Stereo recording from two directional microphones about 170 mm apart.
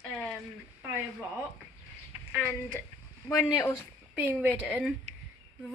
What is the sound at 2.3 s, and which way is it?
Speech, 5° left (ahead or behind).